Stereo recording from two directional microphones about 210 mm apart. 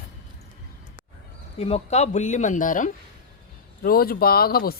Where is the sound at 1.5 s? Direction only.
30° left (ahead or behind).